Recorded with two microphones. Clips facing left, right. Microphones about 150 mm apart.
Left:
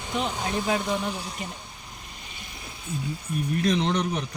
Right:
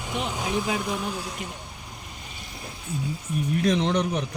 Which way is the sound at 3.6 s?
15° right (ahead or behind).